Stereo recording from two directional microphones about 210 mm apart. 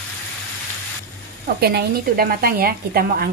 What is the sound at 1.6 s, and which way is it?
A woman's voice, 50° right (ahead or behind).